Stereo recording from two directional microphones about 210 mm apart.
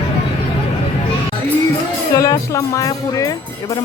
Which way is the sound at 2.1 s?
15° left (ahead or behind).